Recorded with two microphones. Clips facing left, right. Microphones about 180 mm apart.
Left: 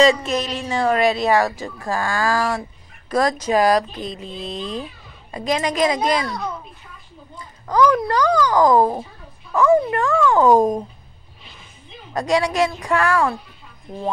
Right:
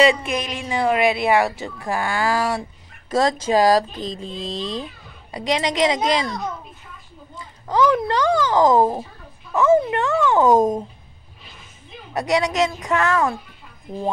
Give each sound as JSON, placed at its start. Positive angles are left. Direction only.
{"t": 0.0, "sound": "a child's voice", "side_deg": -15}
{"t": 4.4, "sound": "speech", "side_deg": -90}
{"t": 5.3, "sound": "a child's voice", "side_deg": -20}
{"t": 7.6, "sound": "a child's voice", "side_deg": -20}
{"t": 12.1, "sound": "a child's voice", "side_deg": -15}